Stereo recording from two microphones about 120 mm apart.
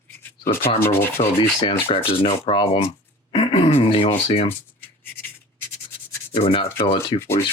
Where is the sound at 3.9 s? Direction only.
50° left (ahead or behind).